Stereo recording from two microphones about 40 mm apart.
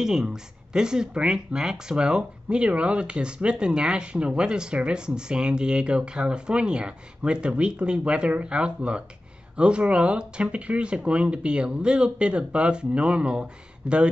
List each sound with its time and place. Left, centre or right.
0.0 s speech: centre